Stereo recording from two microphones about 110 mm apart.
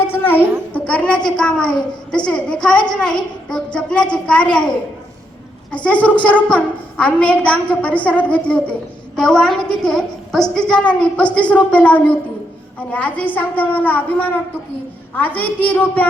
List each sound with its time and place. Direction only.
0.1 s a sound: 15° left (ahead or behind)
0.7 s a child's voice: 10° left (ahead or behind)
5.7 s a child's voice: 10° left (ahead or behind)